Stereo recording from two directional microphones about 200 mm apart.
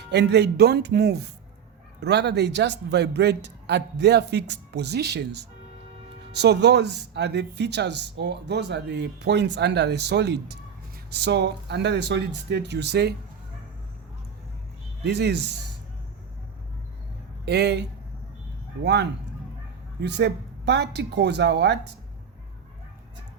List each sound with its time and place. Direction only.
0.0 s speech: 55° right (ahead or behind)
15.0 s speech: 55° right (ahead or behind)
17.4 s speech: 55° right (ahead or behind)
20.0 s speech: 60° right (ahead or behind)